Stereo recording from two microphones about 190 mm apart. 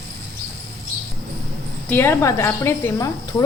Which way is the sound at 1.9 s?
10° left (ahead or behind).